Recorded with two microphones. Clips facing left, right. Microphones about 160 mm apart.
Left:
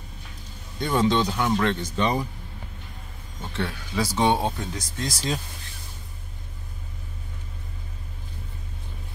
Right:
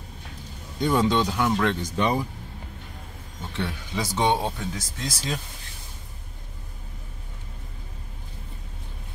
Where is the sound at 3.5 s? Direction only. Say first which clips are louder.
Left 2 dB; 15° right (ahead or behind).